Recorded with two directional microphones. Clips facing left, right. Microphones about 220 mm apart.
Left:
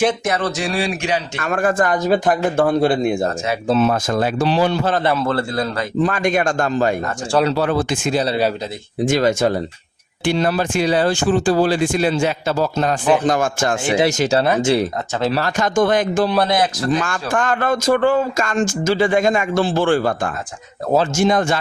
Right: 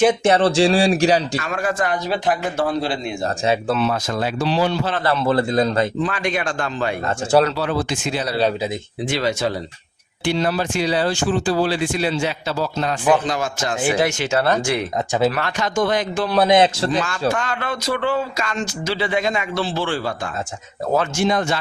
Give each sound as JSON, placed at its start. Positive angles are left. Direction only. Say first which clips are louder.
{"t": 0.3, "sound": "speech", "louder": "right 6 dB", "side_deg": -30}
{"t": 1.4, "sound": "speech", "louder": "left 4 dB", "side_deg": 50}
{"t": 5.2, "sound": "a man's voice", "louder": "right 3 dB", "side_deg": -15}
{"t": 6.0, "sound": "speech", "louder": "left 5 dB", "side_deg": 45}
{"t": 14.0, "sound": "speech", "louder": "left 3 dB", "side_deg": 35}
{"t": 16.5, "sound": "a man's voice", "louder": "right 3 dB", "side_deg": -25}
{"t": 17.0, "sound": "speech", "louder": "even", "side_deg": 50}